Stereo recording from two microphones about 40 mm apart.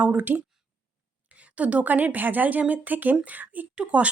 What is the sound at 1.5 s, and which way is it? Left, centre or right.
Speech, right.